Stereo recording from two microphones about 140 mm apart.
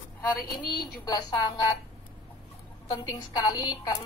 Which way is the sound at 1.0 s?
30° left (ahead or behind).